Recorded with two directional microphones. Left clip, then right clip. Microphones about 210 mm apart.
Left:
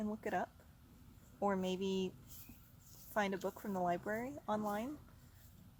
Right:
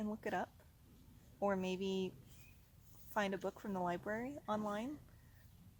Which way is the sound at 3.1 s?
5° right (ahead or behind).